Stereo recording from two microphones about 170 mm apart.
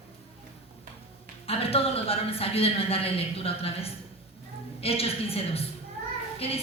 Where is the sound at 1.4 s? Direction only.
35° left (ahead or behind).